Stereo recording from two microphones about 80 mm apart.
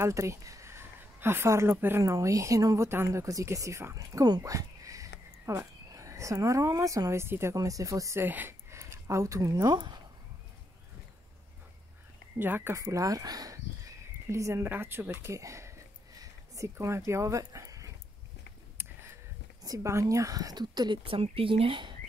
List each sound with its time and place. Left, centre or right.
0.0 s speech: right
2.0 s speech: right
4.4 s a sound: right
5.9 s a woman's voice: right
7.5 s speech: right
8.2 s speech: right
12.4 s speech: right
12.7 s speech: right
16.2 s dog: right
18.8 s a sound: right
19.6 s speech: right
21.5 s speech: right